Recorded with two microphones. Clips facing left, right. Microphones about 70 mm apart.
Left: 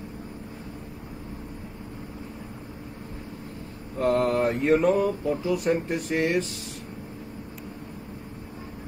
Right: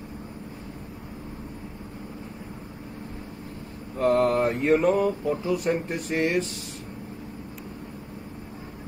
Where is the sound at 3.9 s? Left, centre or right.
Right.